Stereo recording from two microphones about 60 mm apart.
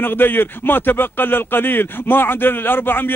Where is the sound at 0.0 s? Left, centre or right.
Left.